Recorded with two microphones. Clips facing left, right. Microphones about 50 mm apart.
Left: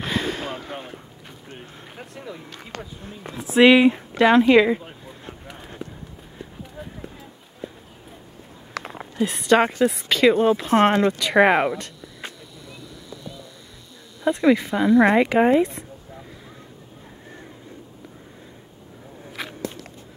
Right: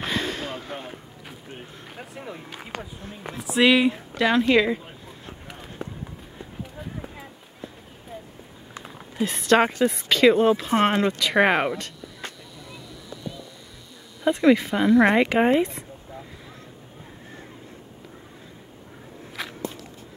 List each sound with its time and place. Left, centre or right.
0.0 s a sound: centre
1.5 s speech: centre
3.5 s speech: centre
8.8 s a sound: left
9.6 s speech: centre
14.4 s speech: centre
15.3 s speech: centre
19.4 s walk: centre